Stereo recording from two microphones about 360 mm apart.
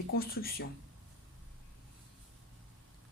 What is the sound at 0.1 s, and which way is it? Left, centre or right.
Speech, left.